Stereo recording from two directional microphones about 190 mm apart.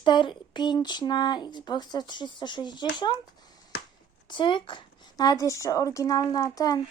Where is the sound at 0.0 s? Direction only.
25° left (ahead or behind).